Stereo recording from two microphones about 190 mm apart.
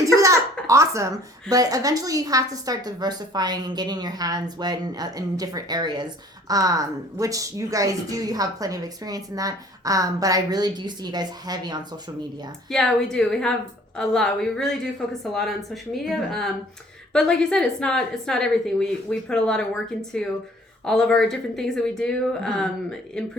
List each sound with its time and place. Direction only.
0.0 s a sound: 15° right (ahead or behind)
0.7 s a woman's voice: 15° right (ahead or behind)
12.7 s a woman's voice: 5° left (ahead or behind)